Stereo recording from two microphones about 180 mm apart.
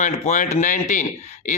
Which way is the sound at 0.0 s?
45° left (ahead or behind).